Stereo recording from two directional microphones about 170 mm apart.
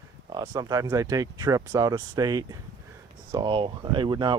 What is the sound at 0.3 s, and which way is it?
Speech, 20° right (ahead or behind).